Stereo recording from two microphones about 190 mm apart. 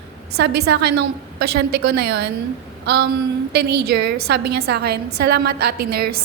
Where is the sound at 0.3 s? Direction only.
60° right (ahead or behind).